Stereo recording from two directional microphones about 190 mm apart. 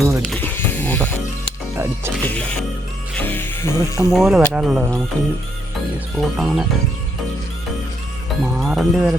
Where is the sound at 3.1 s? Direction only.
10° left (ahead or behind).